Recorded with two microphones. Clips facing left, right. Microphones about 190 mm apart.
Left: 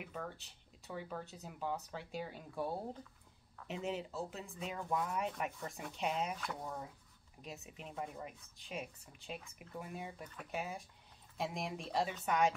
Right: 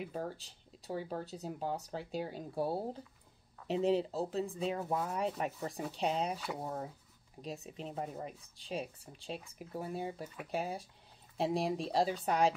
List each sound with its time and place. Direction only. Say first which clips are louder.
0.0 s speech: right 6 dB; 30° right (ahead or behind)
7.4 s speech: right 7 dB; 35° right (ahead or behind)